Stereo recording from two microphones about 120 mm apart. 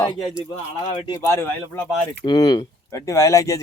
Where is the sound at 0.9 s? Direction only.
40° left (ahead or behind).